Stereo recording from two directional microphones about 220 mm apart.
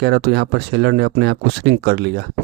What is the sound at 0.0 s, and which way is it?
Speech, 50° right (ahead or behind).